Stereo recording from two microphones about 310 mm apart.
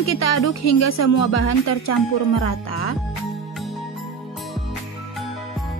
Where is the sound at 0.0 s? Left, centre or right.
Left.